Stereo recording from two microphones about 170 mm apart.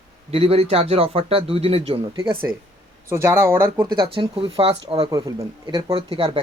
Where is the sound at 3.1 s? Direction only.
15° right (ahead or behind).